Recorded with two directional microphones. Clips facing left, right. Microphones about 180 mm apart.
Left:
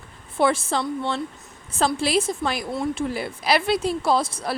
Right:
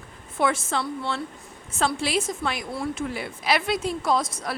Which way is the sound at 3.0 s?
35° left (ahead or behind).